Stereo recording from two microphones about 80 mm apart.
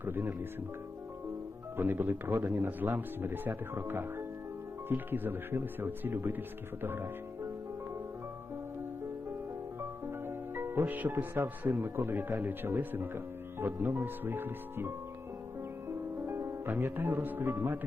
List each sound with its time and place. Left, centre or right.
0.0 s speech: right
1.7 s speech: right
9.8 s music: right
11.8 s speech: right
15.9 s music: right